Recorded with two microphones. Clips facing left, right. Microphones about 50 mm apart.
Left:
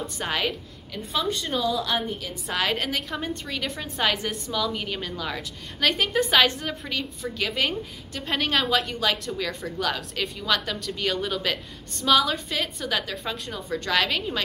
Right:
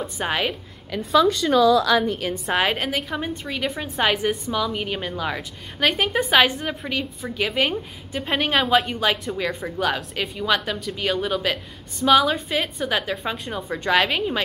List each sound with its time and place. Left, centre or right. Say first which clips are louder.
0.0 s a woman's voice: right 3 dB; centre
0.9 s a woman's voice: right 9 dB; right
2.1 s a woman's voice: right 8 dB; right
2.5 s a woman's voice: right 4 dB; right
2.8 s a woman's voice: right 3 dB; centre